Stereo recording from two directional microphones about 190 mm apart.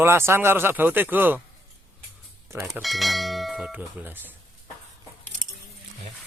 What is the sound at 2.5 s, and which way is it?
Speech, 10° right (ahead or behind).